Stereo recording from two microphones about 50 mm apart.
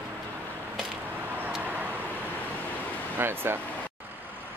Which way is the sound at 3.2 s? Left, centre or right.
Right.